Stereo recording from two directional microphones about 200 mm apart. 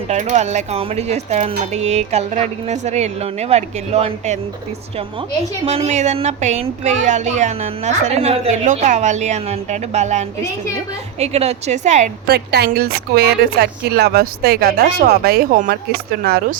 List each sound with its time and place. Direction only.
0.1 s a woman's voice: 35° right (ahead or behind)
5.6 s a woman's voice: 30° right (ahead or behind)
12.3 s speech: 55° right (ahead or behind)